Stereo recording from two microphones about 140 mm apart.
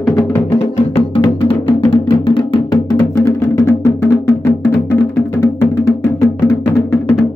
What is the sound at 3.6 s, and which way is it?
Music, 20° left (ahead or behind).